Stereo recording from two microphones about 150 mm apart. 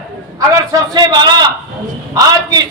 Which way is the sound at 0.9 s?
25° right (ahead or behind).